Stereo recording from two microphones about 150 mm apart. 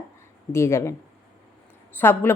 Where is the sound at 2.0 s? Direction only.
15° left (ahead or behind).